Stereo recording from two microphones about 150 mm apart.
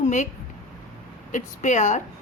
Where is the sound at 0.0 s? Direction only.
55° left (ahead or behind).